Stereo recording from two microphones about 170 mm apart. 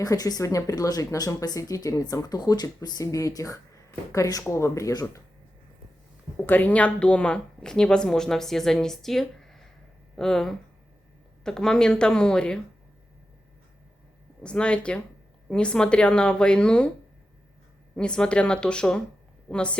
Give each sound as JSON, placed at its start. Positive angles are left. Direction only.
{"t": 0.0, "sound": "speech", "side_deg": 20}
{"t": 6.3, "sound": "a woman's voice", "side_deg": 10}
{"t": 14.4, "sound": "a woman's voice", "side_deg": 5}
{"t": 17.9, "sound": "a woman's voice", "side_deg": 5}